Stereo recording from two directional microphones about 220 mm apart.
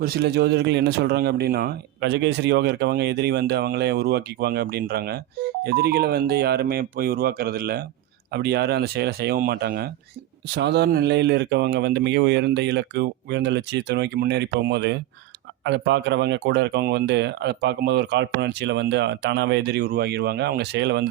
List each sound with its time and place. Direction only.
0.0 s speech: 45° right (ahead or behind)